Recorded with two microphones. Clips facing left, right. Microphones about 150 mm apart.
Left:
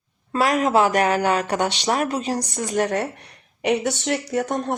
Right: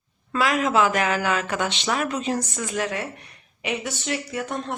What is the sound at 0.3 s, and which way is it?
Speech, 40° left (ahead or behind).